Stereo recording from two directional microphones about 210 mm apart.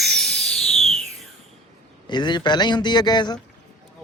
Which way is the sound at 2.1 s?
20° left (ahead or behind).